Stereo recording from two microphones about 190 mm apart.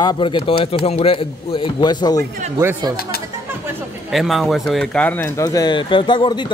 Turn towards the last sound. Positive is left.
turn(degrees=25)  # may be behind; listen again after turning